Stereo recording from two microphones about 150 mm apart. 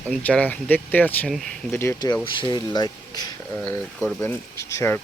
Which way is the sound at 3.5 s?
15° left (ahead or behind).